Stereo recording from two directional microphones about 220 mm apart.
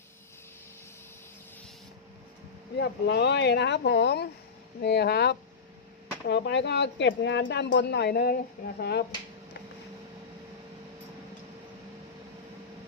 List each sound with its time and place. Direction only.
2.7 s speech: 50° left (ahead or behind)